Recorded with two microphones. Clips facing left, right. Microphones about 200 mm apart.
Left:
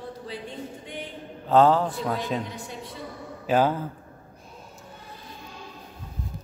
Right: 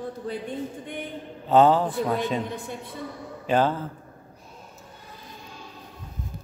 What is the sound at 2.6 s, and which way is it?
Speech, 55° right (ahead or behind).